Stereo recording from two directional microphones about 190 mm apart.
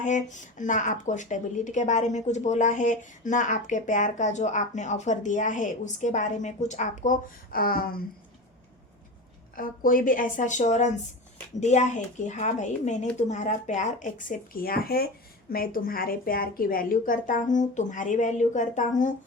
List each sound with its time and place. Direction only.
0.0 s speech: 40° left (ahead or behind)
9.6 s speech: 45° left (ahead or behind)